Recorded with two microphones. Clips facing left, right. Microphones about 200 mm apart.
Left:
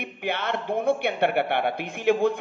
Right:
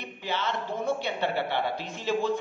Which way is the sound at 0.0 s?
60° left (ahead or behind).